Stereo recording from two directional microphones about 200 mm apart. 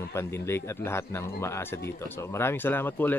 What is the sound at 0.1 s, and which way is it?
A man's voice, 15° left (ahead or behind).